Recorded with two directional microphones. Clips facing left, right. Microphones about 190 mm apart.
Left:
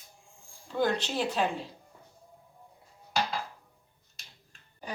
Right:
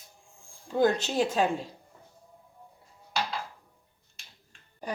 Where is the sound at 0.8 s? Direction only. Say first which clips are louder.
Right 4 dB; 45° right (ahead or behind).